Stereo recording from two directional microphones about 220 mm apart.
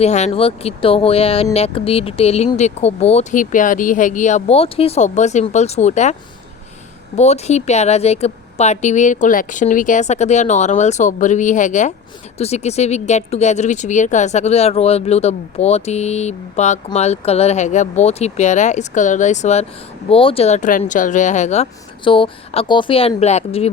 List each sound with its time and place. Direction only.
0.0 s speech: 30° left (ahead or behind)
7.2 s speech: 30° left (ahead or behind)